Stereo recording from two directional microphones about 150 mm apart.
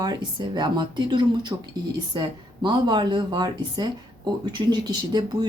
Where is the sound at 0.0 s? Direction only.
30° right (ahead or behind).